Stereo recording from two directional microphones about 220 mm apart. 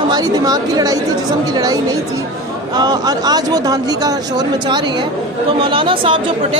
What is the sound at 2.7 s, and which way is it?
Speech, 20° right (ahead or behind).